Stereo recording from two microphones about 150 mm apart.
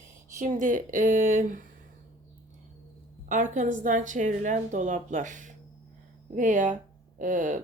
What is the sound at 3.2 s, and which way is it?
A woman's voice, 55° right (ahead or behind).